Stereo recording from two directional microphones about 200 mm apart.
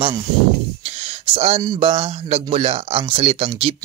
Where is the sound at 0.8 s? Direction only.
30° right (ahead or behind).